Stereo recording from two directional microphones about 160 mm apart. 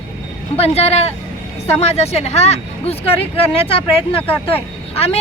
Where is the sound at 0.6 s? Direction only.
40° left (ahead or behind).